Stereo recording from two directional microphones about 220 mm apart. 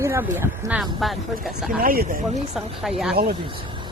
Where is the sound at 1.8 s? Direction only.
40° right (ahead or behind).